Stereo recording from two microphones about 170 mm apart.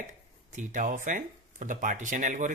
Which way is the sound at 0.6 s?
50° right (ahead or behind).